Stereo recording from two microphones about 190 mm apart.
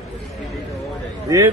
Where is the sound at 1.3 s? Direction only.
15° right (ahead or behind).